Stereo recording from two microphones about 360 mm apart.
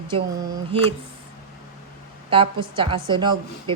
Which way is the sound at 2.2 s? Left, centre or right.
Centre.